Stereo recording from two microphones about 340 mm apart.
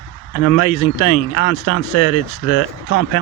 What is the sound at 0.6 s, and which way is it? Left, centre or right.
Speech, left.